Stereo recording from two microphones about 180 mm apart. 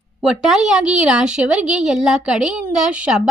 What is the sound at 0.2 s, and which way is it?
A woman's voice, centre (ahead or behind).